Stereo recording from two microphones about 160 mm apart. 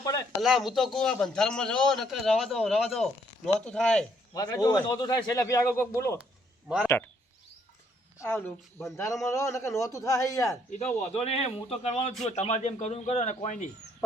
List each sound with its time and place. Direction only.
0.0 s a sound: 25° left (ahead or behind)
0.4 s a man's voice: centre (ahead or behind)
4.4 s a man's voice: 20° left (ahead or behind)
8.2 s a man's voice: 15° left (ahead or behind)
10.7 s a man's voice: 45° left (ahead or behind)